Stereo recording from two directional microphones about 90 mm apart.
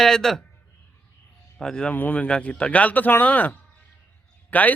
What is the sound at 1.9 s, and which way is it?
Speech, 20° left (ahead or behind).